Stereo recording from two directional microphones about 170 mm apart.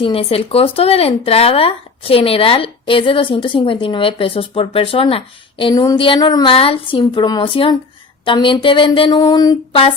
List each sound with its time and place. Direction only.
0.0 s speech: 35° left (ahead or behind)